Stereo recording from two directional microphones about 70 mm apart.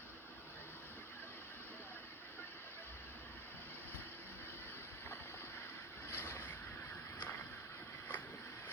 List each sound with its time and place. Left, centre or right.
6.1 s vehicle: left